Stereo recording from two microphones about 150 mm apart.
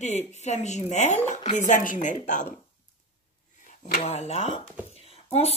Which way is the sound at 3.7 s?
45° left (ahead or behind).